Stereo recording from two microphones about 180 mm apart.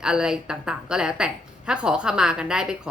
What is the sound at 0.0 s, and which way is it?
A woman's voice, 5° right (ahead or behind).